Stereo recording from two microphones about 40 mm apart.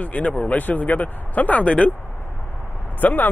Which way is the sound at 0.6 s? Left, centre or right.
Left.